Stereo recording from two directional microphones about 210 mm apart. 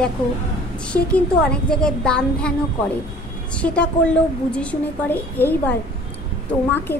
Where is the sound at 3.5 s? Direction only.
5° left (ahead or behind).